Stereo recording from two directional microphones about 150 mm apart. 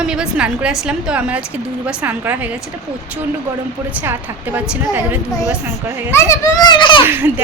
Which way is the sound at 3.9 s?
10° right (ahead or behind).